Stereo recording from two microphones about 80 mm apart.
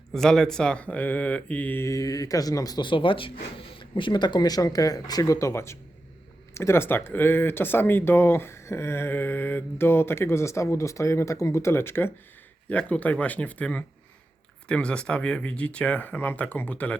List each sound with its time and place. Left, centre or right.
0.1 s speech: centre
1.8 s speech: left
2.8 s speech: left
5.2 s speech: left
12.6 s speech: centre